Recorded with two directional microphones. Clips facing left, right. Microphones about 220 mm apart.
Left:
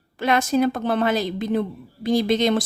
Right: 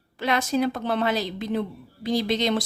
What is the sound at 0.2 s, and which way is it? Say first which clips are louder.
Speech: left 4 dB; 50° left (ahead or behind).